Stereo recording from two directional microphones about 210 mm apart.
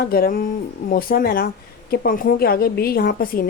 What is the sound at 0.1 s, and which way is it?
Speech, 45° left (ahead or behind).